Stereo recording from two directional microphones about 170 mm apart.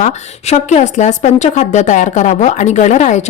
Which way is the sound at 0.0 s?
40° left (ahead or behind).